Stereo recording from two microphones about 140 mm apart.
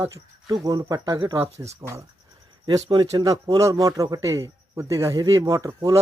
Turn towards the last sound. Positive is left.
turn(degrees=-25)  # may be behind; listen again after turning